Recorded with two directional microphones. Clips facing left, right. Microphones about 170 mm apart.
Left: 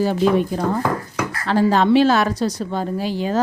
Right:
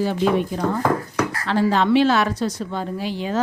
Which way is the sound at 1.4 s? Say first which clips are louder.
Left 4 dB; 40° left (ahead or behind).